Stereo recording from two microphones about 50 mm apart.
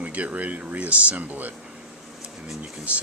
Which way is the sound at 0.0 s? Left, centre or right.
Right.